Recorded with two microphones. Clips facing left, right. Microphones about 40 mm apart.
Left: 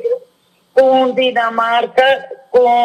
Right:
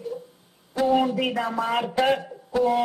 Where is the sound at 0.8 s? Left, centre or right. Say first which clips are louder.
Left 10 dB; left.